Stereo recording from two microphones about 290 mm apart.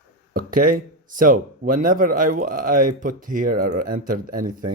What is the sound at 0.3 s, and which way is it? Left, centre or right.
Speech, right.